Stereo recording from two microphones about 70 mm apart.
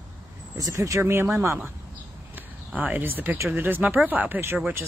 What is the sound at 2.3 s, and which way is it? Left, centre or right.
Speech, right.